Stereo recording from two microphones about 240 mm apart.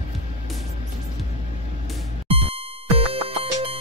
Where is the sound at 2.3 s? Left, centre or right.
Right.